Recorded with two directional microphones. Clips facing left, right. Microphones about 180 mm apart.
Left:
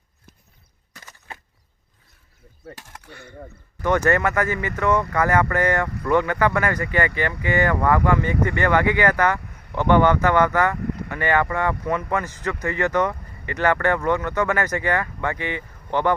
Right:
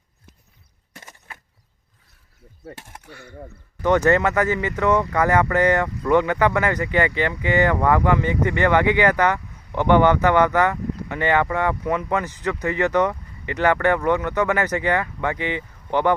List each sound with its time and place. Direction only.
1.3 s vehicle: 25° left (ahead or behind)
2.7 s speech: 20° right (ahead or behind)
3.1 s speech: 10° right (ahead or behind)
3.8 s speech: 20° right (ahead or behind)